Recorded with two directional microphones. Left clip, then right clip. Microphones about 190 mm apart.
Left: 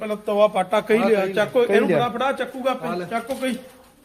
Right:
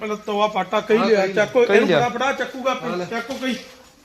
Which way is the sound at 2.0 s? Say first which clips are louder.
Right 2 dB; 15° right (ahead or behind).